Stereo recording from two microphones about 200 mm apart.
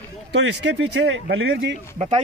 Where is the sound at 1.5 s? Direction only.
35° right (ahead or behind).